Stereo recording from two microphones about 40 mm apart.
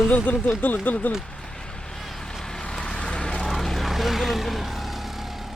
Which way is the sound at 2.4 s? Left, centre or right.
Centre.